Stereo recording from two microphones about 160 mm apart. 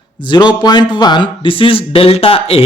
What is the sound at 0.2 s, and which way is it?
Speech, 30° left (ahead or behind).